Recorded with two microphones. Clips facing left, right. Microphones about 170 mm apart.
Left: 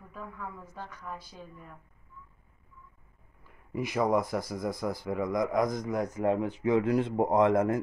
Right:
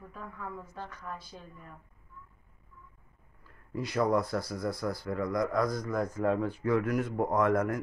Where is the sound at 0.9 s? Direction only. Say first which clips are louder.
Even; 10° left (ahead or behind).